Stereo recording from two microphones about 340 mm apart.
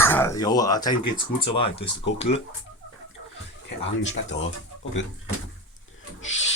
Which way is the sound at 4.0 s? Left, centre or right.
Left.